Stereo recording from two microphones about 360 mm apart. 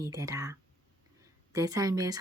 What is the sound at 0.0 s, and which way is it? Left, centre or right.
Speech, centre.